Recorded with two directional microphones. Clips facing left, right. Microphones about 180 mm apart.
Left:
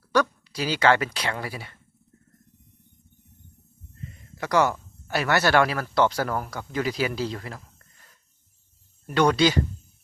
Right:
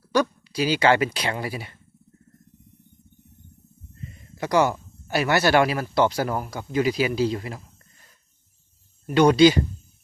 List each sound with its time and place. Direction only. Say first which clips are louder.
0.1 s speech: right 1 dB; 15° right (ahead or behind)
4.4 s speech: right 2 dB; 15° right (ahead or behind)
9.1 s speech: right 5 dB; 15° right (ahead or behind)